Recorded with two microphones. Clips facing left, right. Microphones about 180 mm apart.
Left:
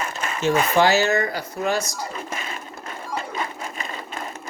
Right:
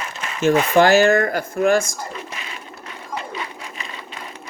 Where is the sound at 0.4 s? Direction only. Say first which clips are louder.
Right 4 dB; 50° right (ahead or behind).